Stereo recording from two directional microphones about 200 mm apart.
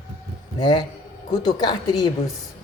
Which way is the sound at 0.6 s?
20° left (ahead or behind).